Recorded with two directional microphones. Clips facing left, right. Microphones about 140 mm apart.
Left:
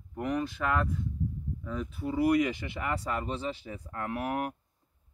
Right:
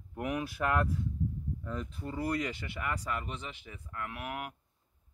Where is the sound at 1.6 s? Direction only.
Centre (ahead or behind).